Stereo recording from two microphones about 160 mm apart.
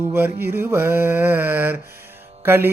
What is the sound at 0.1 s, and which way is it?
Mantra, 15° right (ahead or behind).